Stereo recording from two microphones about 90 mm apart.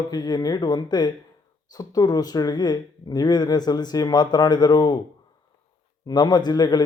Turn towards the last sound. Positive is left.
turn(degrees=50)  # may be behind; listen again after turning